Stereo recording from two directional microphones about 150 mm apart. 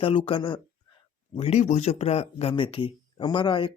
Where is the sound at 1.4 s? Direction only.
45° left (ahead or behind).